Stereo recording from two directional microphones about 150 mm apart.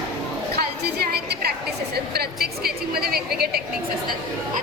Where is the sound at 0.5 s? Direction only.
90° right.